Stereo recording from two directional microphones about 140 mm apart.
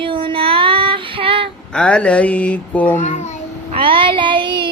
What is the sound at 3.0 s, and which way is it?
Speech, 60° left (ahead or behind).